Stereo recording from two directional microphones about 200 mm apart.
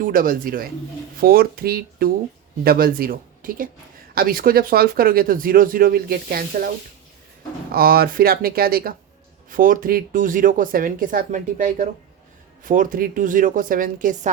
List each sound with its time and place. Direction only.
0.0 s speech: 45° right (ahead or behind)
7.7 s a woman's voice: 50° right (ahead or behind)